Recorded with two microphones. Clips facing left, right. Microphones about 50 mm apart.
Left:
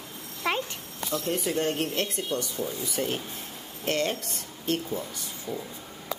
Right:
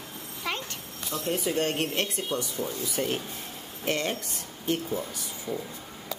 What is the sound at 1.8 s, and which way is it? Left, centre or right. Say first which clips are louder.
Speech: even; centre.